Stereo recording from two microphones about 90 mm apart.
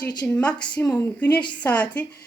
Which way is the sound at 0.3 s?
15° left (ahead or behind).